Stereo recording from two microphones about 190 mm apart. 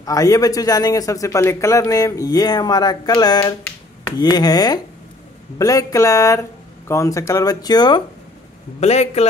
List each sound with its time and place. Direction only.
0.0 s a man's voice: 20° left (ahead or behind)
8.7 s a man's voice: 35° left (ahead or behind)